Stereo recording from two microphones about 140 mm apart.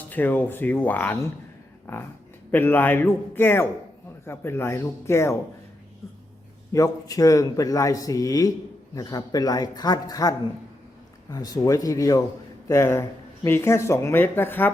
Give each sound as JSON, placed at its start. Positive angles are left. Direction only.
{"t": 0.1, "sound": "a man's voice", "side_deg": 10}
{"t": 2.5, "sound": "a man's voice", "side_deg": 15}
{"t": 6.7, "sound": "speech", "side_deg": 25}